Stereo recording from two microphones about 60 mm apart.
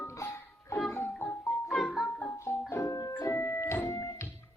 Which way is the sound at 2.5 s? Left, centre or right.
Left.